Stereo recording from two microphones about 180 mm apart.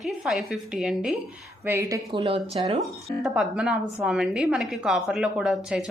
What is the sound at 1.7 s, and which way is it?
A woman's voice, 15° right (ahead or behind).